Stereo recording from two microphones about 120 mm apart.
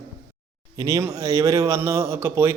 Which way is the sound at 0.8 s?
25° right (ahead or behind).